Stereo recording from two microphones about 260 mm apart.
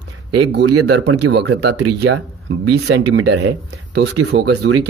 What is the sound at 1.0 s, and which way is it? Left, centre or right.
Speech, right.